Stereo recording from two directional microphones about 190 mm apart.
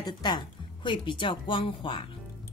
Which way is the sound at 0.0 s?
20° left (ahead or behind).